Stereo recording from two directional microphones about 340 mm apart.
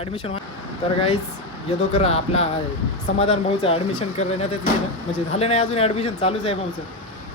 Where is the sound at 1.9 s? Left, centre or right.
Centre.